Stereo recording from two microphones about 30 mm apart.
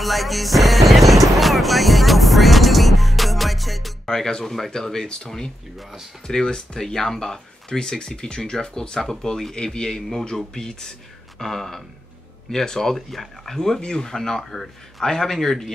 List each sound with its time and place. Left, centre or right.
0.0 s speech: centre
4.0 s music: centre
4.6 s speech: centre
6.8 s speech: centre
12.9 s speech: centre
13.7 s speech: left
14.1 s speech: centre